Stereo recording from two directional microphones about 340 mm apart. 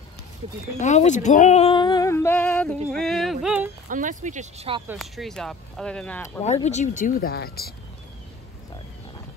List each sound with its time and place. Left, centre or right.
0.7 s speech: left; by 2.8 s centre
2.9 s yodeling: centre
3.9 s speech: right
4.8 s speech: centre
6.4 s speech: centre